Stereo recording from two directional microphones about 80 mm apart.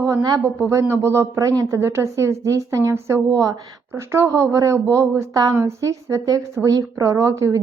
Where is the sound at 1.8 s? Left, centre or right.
Right.